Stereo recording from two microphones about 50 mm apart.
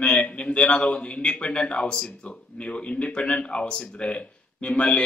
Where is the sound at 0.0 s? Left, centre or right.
Left.